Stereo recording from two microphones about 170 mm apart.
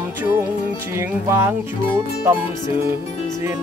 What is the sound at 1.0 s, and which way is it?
Music, 15° right (ahead or behind).